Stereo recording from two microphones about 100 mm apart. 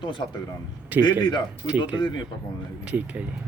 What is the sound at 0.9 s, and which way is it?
Speech, 15° right (ahead or behind).